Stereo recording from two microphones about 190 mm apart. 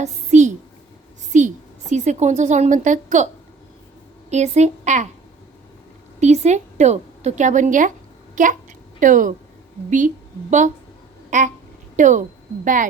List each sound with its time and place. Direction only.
0.0 s a sound: 40° right (ahead or behind)
1.3 s a woman's voice: 40° right (ahead or behind)
4.3 s a woman's voice: 35° right (ahead or behind)
6.1 s a woman's voice: 35° right (ahead or behind)
11.3 s a sound: 40° right (ahead or behind)
11.9 s a woman's voice: 40° right (ahead or behind)